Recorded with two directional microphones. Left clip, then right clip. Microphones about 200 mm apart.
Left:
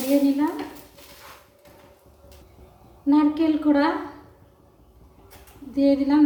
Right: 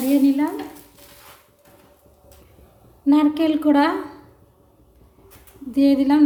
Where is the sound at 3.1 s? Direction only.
50° right (ahead or behind).